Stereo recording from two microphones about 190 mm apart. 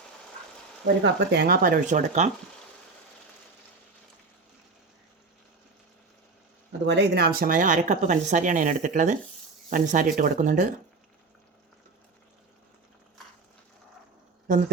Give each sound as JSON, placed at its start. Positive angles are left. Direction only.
{"t": 1.0, "sound": "speech", "side_deg": -60}
{"t": 6.8, "sound": "speech", "side_deg": -65}